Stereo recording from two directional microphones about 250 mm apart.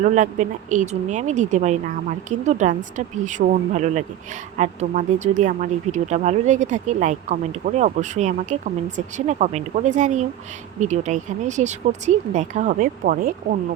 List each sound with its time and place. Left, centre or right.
0.0 s speech: right